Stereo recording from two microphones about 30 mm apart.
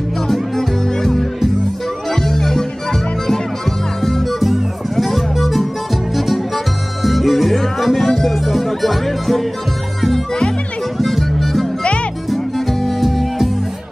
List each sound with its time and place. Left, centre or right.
0.3 s music: centre
4.0 s music: centre
8.5 s speech: centre
11.0 s music: centre